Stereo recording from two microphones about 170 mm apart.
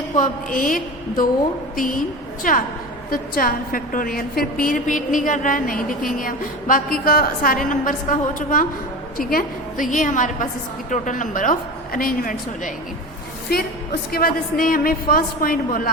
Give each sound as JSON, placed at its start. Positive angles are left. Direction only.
{"t": 0.2, "sound": "a woman's voice", "side_deg": 55}